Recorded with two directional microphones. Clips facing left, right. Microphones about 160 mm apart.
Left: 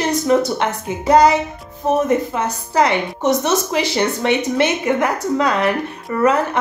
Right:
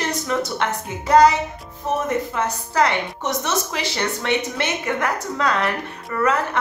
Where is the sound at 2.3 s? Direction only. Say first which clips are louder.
Left 3 dB; 15° left (ahead or behind).